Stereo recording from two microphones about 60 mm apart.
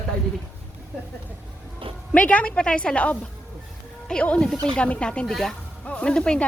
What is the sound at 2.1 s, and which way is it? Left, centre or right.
A woman's voice, left.